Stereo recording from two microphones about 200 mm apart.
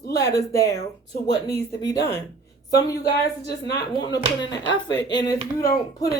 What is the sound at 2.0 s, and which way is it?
Speech, 55° left (ahead or behind).